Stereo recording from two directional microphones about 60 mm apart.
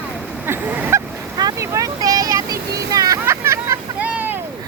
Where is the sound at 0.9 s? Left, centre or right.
Right.